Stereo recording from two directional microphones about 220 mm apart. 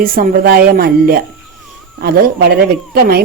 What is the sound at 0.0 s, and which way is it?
Speech, 40° right (ahead or behind).